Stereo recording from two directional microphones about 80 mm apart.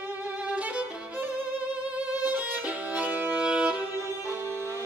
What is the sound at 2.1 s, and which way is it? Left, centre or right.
Violin, centre.